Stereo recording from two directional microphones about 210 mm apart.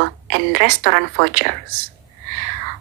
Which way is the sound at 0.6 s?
55° right (ahead or behind).